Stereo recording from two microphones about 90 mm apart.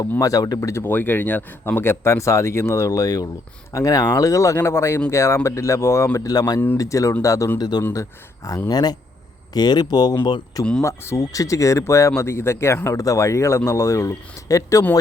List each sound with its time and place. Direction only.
0.2 s speech: 40° left (ahead or behind)
0.7 s speech: 25° left (ahead or behind)
6.1 s speech: 45° left (ahead or behind)
6.7 s speech: 35° left (ahead or behind)
7.6 s speech: 50° left (ahead or behind)
10.8 s speech: 30° left (ahead or behind)